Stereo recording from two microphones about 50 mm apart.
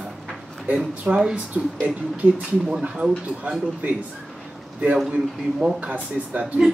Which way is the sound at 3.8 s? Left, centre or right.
Right.